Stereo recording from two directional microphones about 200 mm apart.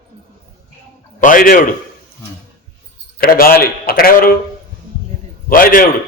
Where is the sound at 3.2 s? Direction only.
45° left (ahead or behind).